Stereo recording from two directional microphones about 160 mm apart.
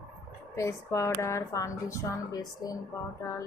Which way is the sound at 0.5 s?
20° left (ahead or behind).